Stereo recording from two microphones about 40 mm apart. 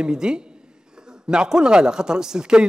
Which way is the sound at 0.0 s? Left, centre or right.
Centre.